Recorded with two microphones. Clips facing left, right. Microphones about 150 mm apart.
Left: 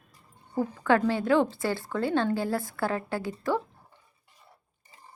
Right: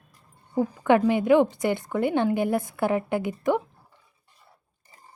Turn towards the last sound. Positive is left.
turn(degrees=-20)  # may be behind; listen again after turning